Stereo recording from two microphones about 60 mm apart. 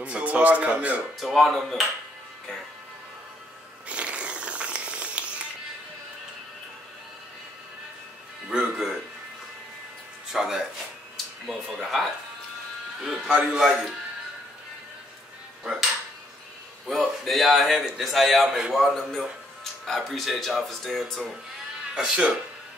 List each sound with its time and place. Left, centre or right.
0.0 s a man's voice: right
1.2 s a man's voice: centre
3.9 s music: centre
8.5 s speech: centre
10.3 s a man's voice: centre
13.3 s a man's voice: centre
16.8 s a man's voice: centre
21.9 s a man's voice: centre